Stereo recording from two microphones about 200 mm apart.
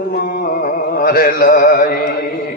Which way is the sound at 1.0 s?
45° left (ahead or behind).